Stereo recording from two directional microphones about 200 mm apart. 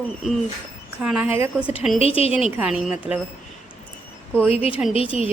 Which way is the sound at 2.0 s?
30° left (ahead or behind).